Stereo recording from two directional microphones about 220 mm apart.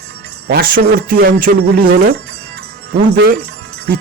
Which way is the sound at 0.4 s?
45° right (ahead or behind).